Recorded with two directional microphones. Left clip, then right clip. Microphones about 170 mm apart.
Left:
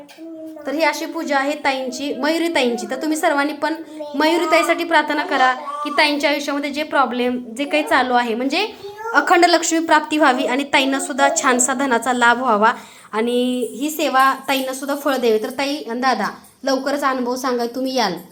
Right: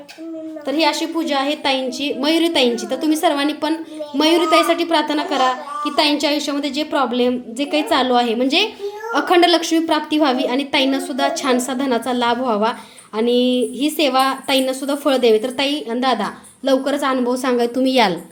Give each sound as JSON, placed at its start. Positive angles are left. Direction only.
{"t": 0.7, "sound": "a woman's voice", "side_deg": -15}